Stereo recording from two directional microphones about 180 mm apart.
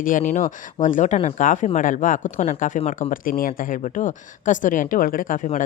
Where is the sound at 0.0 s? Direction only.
45° left (ahead or behind).